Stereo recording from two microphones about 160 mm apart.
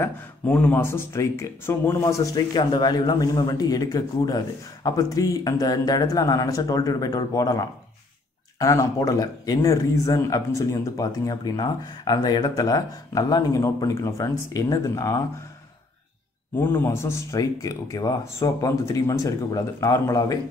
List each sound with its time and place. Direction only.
0.0 s speech: 10° left (ahead or behind)
16.5 s speech: 15° left (ahead or behind)